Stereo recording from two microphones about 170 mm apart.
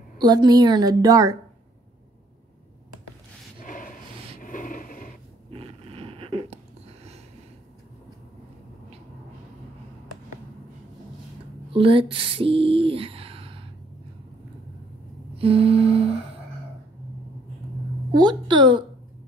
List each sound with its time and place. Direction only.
0.2 s a woman's voice: 25° right (ahead or behind)
3.5 s a sound: 55° left (ahead or behind)
4.4 s rub: 50° left (ahead or behind)
5.5 s zipper: 35° right (ahead or behind)
11.7 s a sound: 30° right (ahead or behind)
15.3 s music: 35° right (ahead or behind)
18.1 s a woman's voice: 25° right (ahead or behind)